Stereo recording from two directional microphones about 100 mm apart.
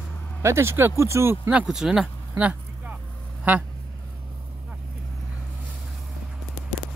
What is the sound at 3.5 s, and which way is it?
Speech, 15° right (ahead or behind).